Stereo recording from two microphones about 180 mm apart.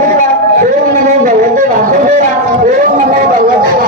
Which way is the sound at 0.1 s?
50° right (ahead or behind).